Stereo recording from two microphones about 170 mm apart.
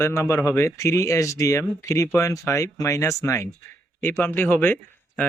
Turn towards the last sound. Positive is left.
turn(degrees=10)  # may be behind; listen again after turning